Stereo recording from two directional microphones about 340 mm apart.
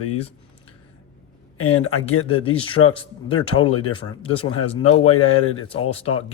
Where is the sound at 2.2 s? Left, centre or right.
Centre.